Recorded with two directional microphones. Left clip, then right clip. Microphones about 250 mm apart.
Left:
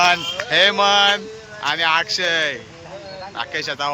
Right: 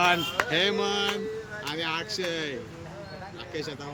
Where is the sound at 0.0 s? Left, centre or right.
Centre.